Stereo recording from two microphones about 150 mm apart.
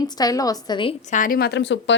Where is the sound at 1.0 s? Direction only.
60° left (ahead or behind); by 1.6 s 80° left.